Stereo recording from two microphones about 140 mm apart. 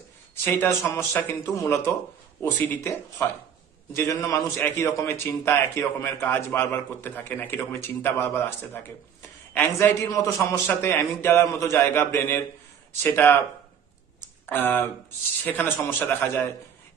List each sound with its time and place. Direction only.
0.4 s a man's voice: 15° left (ahead or behind)
14.4 s a man's voice: 15° left (ahead or behind)